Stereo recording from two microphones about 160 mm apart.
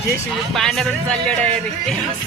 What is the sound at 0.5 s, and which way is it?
Speech, centre (ahead or behind).